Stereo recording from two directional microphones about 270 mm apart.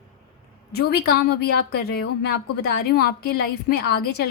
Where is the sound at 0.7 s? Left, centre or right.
Left.